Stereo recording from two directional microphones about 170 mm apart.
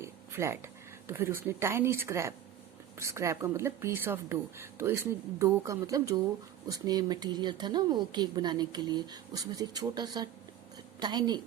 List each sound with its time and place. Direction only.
0.0 s a woman's voice: 15° right (ahead or behind)